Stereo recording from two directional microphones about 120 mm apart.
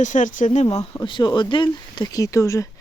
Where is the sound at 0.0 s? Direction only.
90° left; by 0.8 s 70° left (ahead or behind).